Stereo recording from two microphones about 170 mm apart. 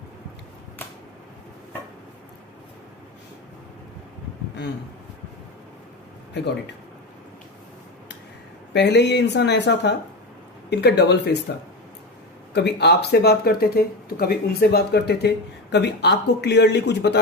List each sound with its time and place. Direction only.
8.7 s speech: 90° left
10.7 s speech: 80° left
12.5 s speech: 75° left (ahead or behind)